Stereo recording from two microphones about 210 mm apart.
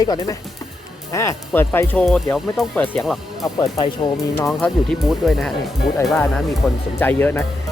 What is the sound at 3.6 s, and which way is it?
Speech, 20° left (ahead or behind).